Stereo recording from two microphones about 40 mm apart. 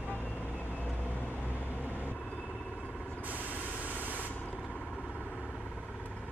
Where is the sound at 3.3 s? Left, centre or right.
Right.